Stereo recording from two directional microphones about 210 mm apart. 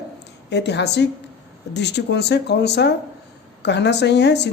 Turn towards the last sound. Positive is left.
turn(degrees=55)  # may be behind; listen again after turning